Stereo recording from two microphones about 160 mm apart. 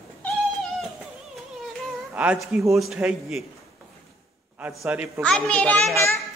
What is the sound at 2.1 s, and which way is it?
A man's voice, 10° right (ahead or behind).